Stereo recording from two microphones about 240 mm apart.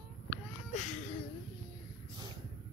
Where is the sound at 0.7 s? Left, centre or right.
Left.